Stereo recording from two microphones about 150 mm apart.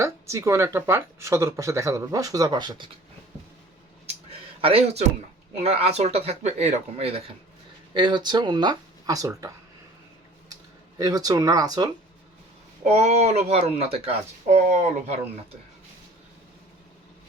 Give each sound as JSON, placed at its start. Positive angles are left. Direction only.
{"t": 0.0, "sound": "a woman's voice", "side_deg": -20}
{"t": 4.0, "sound": "a sound", "side_deg": -40}
{"t": 5.5, "sound": "speech", "side_deg": -45}
{"t": 7.9, "sound": "a woman's voice", "side_deg": -30}
{"t": 10.5, "sound": "speech", "side_deg": -25}
{"t": 12.8, "sound": "speech", "side_deg": -50}